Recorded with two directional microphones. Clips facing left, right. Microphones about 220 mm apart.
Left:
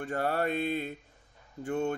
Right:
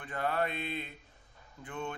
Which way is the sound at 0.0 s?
45° left (ahead or behind).